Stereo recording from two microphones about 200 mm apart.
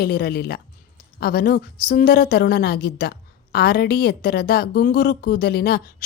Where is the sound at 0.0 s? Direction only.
50° left (ahead or behind).